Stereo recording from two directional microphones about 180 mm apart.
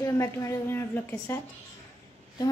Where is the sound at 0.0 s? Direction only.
15° left (ahead or behind).